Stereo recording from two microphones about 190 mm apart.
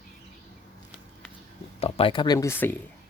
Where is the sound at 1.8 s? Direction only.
30° left (ahead or behind); by 2.8 s 10° left (ahead or behind).